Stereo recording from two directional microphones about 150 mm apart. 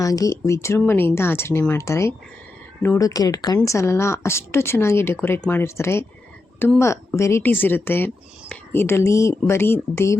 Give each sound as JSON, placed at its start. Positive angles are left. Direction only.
{"t": 0.0, "sound": "speech", "side_deg": 20}